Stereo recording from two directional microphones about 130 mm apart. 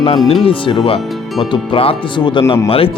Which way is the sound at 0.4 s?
40° left (ahead or behind).